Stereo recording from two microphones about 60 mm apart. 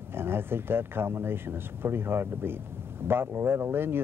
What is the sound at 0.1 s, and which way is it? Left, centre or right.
Speech, right.